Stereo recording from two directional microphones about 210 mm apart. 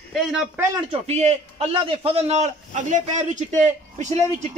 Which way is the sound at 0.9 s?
30° right (ahead or behind).